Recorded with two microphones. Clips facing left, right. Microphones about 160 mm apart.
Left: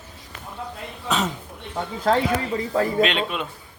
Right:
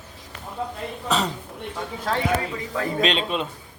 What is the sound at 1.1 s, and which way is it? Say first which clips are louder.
Speech: even; centre (ahead or behind).